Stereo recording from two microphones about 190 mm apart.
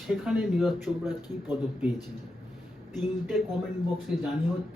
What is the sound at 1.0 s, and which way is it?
Speech, 10° right (ahead or behind).